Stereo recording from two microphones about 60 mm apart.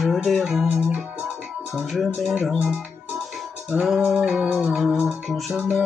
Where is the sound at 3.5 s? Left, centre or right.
Right.